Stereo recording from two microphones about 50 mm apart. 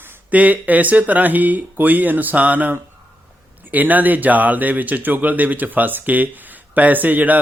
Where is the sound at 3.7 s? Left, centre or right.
Right.